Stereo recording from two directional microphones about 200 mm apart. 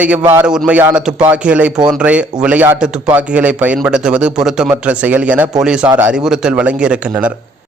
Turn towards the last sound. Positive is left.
turn(degrees=-5)  # may be behind; listen again after turning